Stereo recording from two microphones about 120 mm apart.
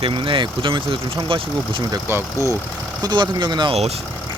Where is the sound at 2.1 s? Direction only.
25° right (ahead or behind).